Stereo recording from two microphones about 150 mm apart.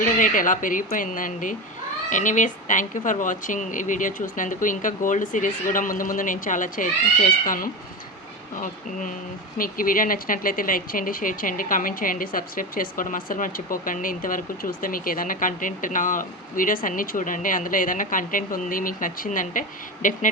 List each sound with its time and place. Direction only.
0.0 s speech: 60° left (ahead or behind)